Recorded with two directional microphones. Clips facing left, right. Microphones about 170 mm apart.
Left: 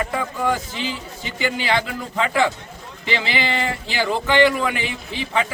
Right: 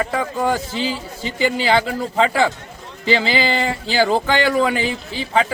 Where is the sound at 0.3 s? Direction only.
35° right (ahead or behind).